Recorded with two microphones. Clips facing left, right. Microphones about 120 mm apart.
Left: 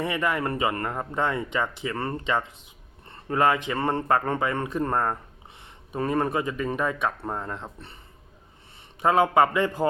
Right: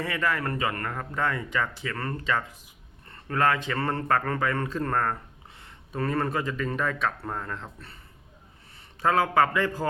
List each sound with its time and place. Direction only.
0.0 s speech: 20° left (ahead or behind)
9.0 s speech: 20° left (ahead or behind)